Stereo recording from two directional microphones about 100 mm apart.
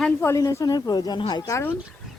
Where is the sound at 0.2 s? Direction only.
30° left (ahead or behind).